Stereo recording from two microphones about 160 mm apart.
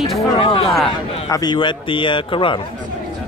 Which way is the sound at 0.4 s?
35° left (ahead or behind).